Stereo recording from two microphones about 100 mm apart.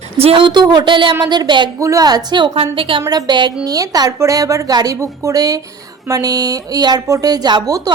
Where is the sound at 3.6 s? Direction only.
40° right (ahead or behind).